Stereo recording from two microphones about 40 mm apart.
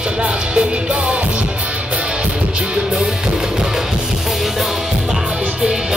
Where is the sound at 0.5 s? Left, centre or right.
Right.